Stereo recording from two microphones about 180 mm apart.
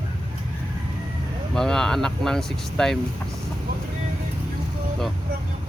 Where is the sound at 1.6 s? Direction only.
5° left (ahead or behind).